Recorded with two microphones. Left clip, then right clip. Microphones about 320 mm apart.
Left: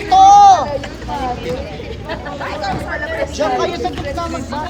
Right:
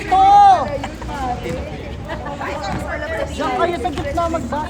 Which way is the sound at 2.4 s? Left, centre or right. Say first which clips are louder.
Left 4 dB; left.